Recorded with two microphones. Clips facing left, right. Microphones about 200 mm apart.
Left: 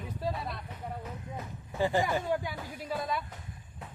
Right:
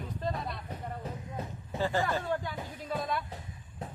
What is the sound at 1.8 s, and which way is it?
Speech, 15° left (ahead or behind).